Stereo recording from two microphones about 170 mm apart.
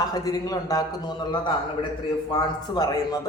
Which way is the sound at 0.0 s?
20° left (ahead or behind).